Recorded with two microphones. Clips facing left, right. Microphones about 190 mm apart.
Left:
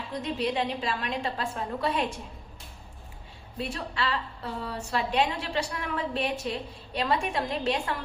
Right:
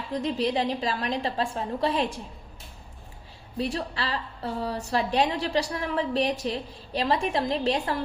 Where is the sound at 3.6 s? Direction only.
35° right (ahead or behind).